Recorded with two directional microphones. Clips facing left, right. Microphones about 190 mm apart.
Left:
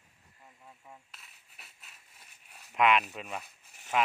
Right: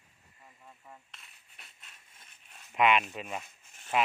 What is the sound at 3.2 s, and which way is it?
Speech, centre (ahead or behind).